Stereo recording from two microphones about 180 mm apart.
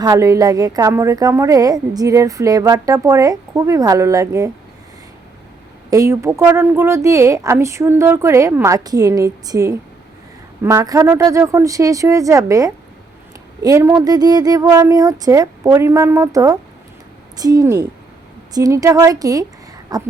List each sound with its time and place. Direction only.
0.0 s a woman's voice: 20° right (ahead or behind)
5.9 s a woman's voice: 15° right (ahead or behind)